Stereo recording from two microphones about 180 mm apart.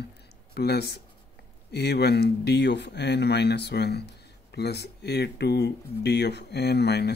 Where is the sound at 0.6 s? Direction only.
65° left (ahead or behind).